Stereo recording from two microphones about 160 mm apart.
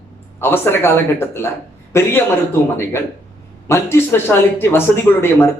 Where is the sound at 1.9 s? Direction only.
15° left (ahead or behind).